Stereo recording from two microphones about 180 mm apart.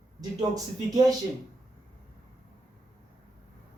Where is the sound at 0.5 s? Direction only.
20° right (ahead or behind).